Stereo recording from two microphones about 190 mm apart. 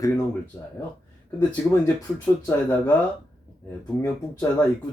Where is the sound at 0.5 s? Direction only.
10° left (ahead or behind).